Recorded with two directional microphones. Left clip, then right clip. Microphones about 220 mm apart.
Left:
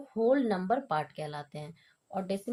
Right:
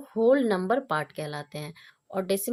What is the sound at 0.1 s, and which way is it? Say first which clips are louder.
Speech: right 5 dB; 40° right (ahead or behind).